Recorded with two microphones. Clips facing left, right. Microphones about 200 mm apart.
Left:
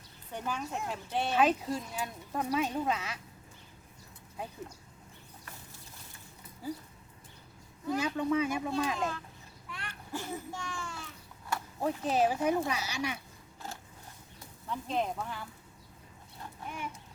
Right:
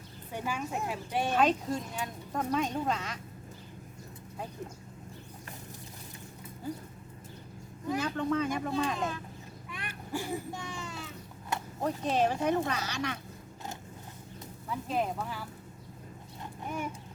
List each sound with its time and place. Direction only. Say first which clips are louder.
0.3 s speech: right 2 dB; 10° right (ahead or behind)
1.4 s speech: left 1 dB; 5° left (ahead or behind)
7.9 s speech: left 1 dB; 10° left (ahead or behind)
9.6 s a child's voice: right 2 dB; 15° right (ahead or behind)
11.8 s speech: even; 5° left (ahead or behind)
14.7 s speech: right 1 dB; 5° right (ahead or behind)
16.6 s horse: right 5 dB; 45° right (ahead or behind)